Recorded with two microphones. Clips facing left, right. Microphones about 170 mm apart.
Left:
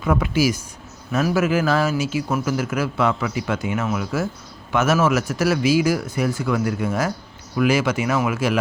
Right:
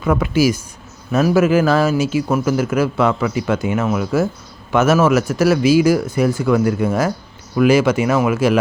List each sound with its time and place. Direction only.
0.0 s a man's voice: 50° right (ahead or behind); by 8.5 s 35° right (ahead or behind)